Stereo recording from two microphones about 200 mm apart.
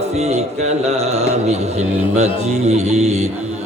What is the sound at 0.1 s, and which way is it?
Mantra, 35° right (ahead or behind).